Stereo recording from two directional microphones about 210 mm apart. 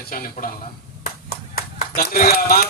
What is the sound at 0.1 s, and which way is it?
Speech, 40° left (ahead or behind).